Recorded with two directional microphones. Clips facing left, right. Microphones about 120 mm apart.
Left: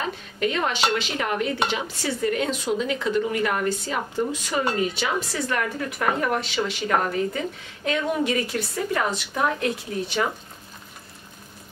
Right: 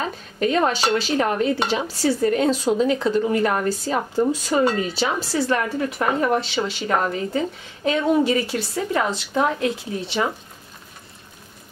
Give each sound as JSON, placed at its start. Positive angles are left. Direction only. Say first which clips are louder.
{"t": 0.4, "sound": "a woman's voice", "louder": "right 4 dB", "side_deg": -40}